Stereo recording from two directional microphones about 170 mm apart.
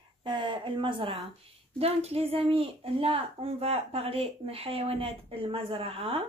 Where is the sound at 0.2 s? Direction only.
30° right (ahead or behind).